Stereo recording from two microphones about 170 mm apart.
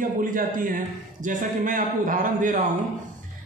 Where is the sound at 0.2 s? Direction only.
55° right (ahead or behind).